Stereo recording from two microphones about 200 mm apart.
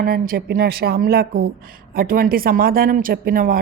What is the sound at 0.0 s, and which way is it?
Speech, 50° right (ahead or behind).